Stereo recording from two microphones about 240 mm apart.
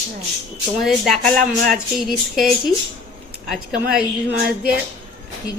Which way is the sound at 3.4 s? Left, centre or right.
Centre.